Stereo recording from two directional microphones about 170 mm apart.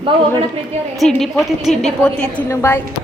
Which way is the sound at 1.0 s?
Centre (ahead or behind).